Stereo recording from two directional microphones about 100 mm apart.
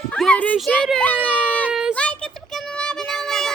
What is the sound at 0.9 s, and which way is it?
Speech, 15° left (ahead or behind).